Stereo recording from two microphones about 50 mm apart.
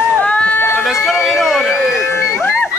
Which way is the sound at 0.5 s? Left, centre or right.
Left.